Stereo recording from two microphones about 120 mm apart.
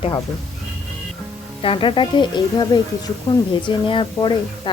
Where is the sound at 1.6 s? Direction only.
45° left (ahead or behind).